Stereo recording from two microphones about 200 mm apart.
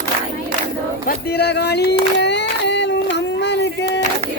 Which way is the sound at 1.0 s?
55° left (ahead or behind).